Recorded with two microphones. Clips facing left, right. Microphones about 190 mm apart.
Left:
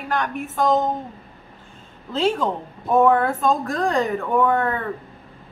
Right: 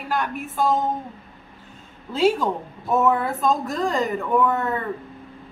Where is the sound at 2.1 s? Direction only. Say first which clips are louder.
Right 1 dB; 10° right (ahead or behind).